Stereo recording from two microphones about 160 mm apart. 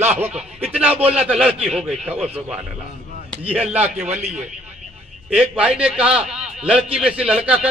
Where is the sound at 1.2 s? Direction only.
5° right (ahead or behind).